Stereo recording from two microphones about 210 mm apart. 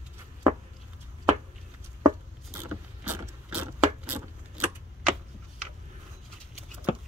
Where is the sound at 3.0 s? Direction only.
10° right (ahead or behind).